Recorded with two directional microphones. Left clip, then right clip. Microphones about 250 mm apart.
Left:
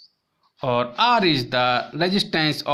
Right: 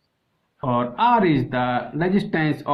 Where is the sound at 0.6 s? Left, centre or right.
Left.